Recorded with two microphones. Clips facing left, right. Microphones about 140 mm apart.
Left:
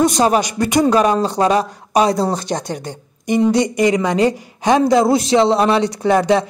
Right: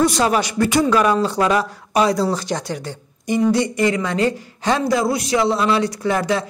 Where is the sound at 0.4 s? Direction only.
20° left (ahead or behind).